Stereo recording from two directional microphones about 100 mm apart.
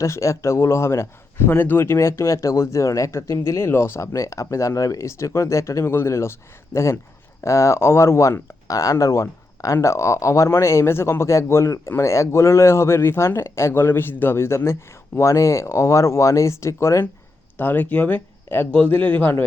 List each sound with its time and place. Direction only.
0.0 s speech: 30° left (ahead or behind)
17.6 s a man's voice: 20° left (ahead or behind)